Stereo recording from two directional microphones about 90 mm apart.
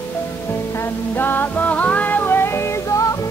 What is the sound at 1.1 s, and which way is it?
Music, 20° left (ahead or behind).